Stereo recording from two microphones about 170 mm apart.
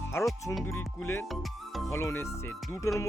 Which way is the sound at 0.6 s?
15° left (ahead or behind).